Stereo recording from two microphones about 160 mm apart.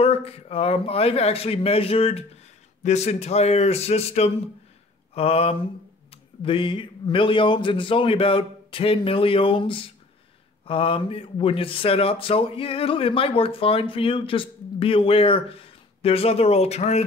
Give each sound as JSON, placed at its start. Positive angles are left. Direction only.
{"t": 0.0, "sound": "speech", "side_deg": 40}